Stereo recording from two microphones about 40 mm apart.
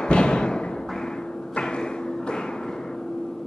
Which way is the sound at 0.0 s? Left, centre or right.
Left.